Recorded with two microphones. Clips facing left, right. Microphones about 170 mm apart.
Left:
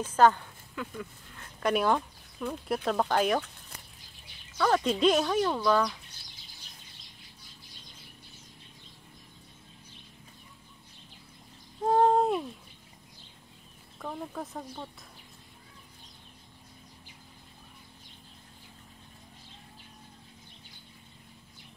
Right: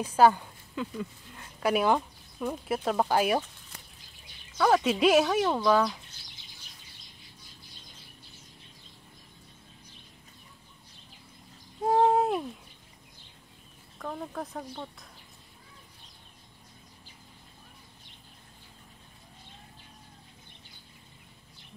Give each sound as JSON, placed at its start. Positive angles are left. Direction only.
{"t": 0.0, "sound": "speech", "side_deg": -10}
{"t": 1.6, "sound": "speech", "side_deg": -5}
{"t": 4.6, "sound": "speech", "side_deg": -5}
{"t": 11.8, "sound": "a sound", "side_deg": -5}
{"t": 13.9, "sound": "speech", "side_deg": 5}